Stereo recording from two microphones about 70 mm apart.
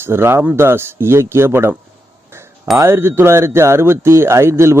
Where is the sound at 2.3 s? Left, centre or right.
Right.